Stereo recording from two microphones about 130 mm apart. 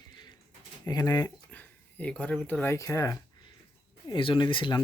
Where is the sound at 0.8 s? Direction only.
30° left (ahead or behind).